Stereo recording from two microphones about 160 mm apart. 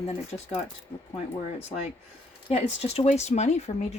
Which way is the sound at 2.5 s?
40° left (ahead or behind).